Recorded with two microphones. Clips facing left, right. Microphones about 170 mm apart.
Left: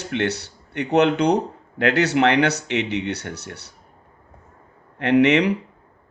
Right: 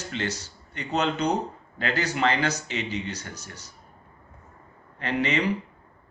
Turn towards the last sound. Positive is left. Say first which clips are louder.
# left 10 dB
turn(degrees=70)  # may be behind; listen again after turning